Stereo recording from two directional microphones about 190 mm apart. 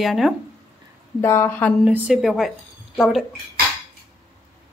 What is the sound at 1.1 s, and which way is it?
Speech, 15° left (ahead or behind).